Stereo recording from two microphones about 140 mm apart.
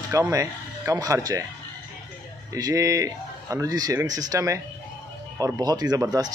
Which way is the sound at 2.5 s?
25° right (ahead or behind).